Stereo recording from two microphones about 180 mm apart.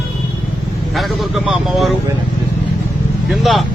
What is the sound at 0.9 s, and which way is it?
Speech, centre (ahead or behind).